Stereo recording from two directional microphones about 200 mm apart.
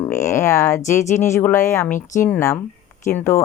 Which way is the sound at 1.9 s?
40° left (ahead or behind).